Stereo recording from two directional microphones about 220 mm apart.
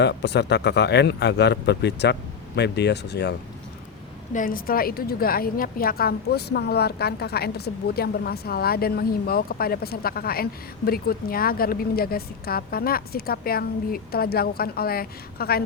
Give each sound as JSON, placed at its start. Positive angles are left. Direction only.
{"t": 0.0, "sound": "a woman's voice", "side_deg": 50}
{"t": 4.3, "sound": "a woman's voice", "side_deg": 35}